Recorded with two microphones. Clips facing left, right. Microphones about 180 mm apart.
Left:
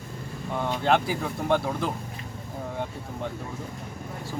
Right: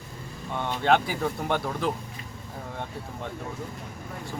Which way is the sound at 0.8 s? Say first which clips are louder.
Right 2 dB; centre (ahead or behind).